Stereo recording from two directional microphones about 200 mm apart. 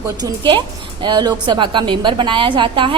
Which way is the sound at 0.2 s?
20° right (ahead or behind).